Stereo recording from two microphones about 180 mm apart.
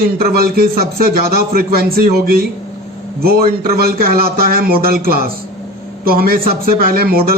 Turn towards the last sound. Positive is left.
turn(degrees=-55)  # may be behind; listen again after turning